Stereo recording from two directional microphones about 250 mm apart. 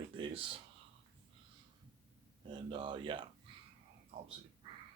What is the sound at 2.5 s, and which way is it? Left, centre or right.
Speech, centre.